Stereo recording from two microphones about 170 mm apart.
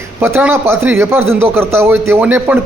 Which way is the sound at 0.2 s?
10° right (ahead or behind).